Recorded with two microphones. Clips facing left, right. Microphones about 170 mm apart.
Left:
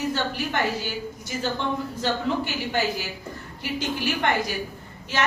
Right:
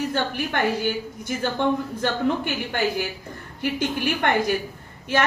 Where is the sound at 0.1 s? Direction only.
55° right (ahead or behind).